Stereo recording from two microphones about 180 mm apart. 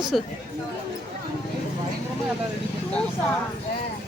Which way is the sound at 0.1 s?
Centre (ahead or behind).